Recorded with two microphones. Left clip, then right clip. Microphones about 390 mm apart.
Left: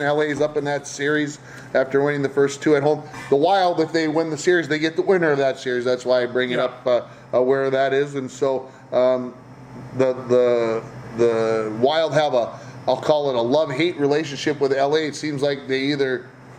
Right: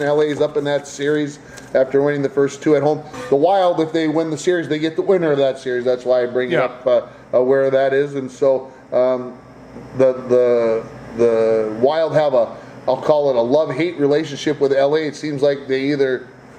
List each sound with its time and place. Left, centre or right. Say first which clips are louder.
0.0 s a man's voice: right 3 dB; centre
5.7 s a man's voice: right 2 dB; centre